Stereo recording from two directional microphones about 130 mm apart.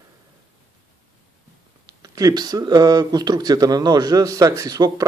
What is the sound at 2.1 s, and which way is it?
Speech, 30° right (ahead or behind).